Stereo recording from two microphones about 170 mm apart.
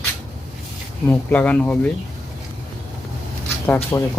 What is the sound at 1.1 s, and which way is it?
Speech, 10° left (ahead or behind).